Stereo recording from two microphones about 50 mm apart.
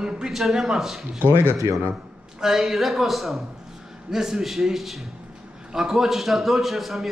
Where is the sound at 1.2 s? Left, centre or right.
Right.